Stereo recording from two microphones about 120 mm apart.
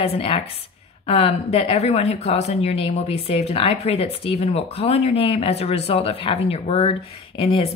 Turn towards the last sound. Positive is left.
turn(degrees=55)  # may be behind; listen again after turning